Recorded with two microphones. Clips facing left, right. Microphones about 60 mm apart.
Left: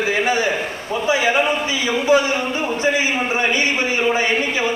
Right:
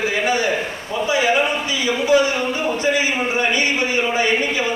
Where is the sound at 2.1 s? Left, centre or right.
Left.